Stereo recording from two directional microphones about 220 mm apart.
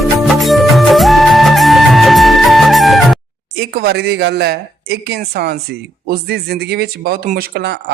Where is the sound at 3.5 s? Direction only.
45° right (ahead or behind).